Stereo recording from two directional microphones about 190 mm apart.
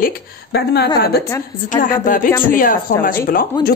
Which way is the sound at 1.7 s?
45° left (ahead or behind).